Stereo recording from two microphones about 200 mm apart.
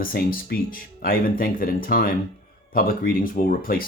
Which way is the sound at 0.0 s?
45° left (ahead or behind).